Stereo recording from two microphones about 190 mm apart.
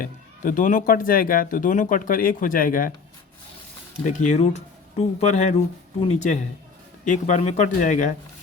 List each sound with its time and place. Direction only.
0.0 s speech: 45° left (ahead or behind)
4.0 s speech: 40° left (ahead or behind)